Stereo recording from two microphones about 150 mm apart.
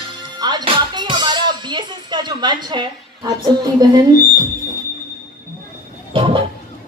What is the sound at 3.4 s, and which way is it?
Speech, 25° right (ahead or behind).